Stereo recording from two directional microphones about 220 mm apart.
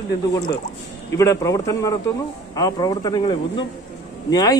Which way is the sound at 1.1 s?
15° left (ahead or behind).